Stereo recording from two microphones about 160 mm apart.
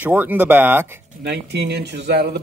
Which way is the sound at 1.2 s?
90° right.